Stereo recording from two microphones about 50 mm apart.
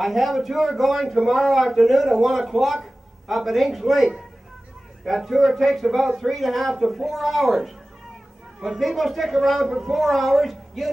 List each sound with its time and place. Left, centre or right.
0.0 s speech: centre